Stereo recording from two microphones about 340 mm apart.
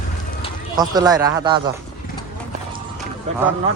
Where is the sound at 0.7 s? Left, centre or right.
Centre.